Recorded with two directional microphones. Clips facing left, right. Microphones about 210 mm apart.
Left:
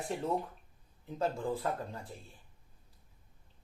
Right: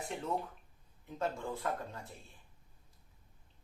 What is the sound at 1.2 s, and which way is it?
Speech, 30° left (ahead or behind).